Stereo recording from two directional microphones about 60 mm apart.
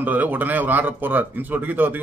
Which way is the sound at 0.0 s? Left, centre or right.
Right.